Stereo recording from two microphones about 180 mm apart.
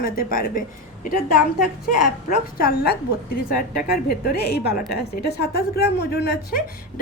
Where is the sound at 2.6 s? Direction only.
60° left (ahead or behind).